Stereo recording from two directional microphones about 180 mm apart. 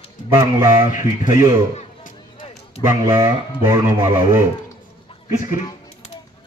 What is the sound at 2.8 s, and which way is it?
Speech, 15° right (ahead or behind).